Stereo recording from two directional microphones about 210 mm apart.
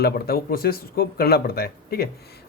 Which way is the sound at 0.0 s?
45° left (ahead or behind).